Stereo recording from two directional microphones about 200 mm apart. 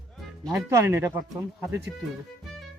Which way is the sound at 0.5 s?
15° right (ahead or behind).